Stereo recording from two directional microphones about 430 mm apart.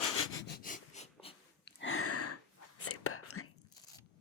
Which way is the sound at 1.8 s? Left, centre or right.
Left.